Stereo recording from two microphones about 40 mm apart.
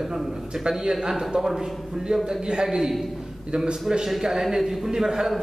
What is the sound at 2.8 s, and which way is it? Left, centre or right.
Speech, centre.